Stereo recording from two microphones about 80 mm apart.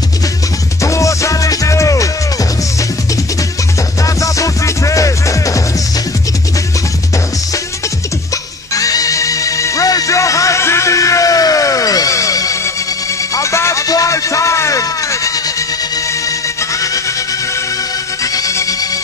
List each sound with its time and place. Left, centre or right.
0.8 s music: left
4.0 s music: left
8.7 s music: left
18.2 s music: left